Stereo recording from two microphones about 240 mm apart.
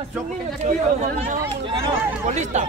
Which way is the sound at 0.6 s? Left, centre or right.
Right.